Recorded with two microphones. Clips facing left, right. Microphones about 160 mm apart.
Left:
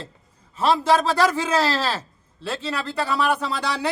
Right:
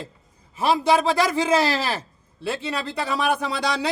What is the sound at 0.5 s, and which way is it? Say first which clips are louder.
Speech: left 1 dB; 10° right (ahead or behind).